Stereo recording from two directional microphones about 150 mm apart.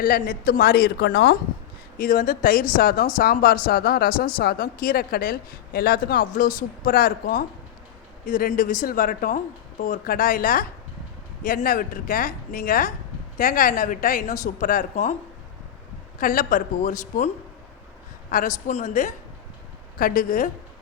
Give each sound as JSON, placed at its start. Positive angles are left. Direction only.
{"t": 0.0, "sound": "a woman's voice", "side_deg": 75}
{"t": 2.0, "sound": "a woman's voice", "side_deg": 70}
{"t": 4.4, "sound": "speech", "side_deg": 75}
{"t": 16.2, "sound": "a woman's voice", "side_deg": 65}
{"t": 20.0, "sound": "speech", "side_deg": 70}